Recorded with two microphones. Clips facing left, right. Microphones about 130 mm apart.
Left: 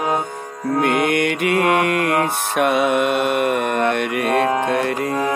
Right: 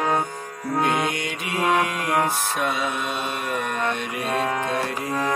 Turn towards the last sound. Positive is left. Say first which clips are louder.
# left 6 dB
turn(degrees=60)  # may be behind; listen again after turning